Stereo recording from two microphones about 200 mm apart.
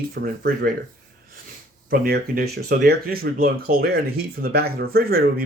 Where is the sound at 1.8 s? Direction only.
50° right (ahead or behind).